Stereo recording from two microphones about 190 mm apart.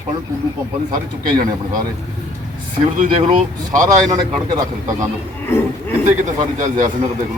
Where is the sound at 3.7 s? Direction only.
20° right (ahead or behind).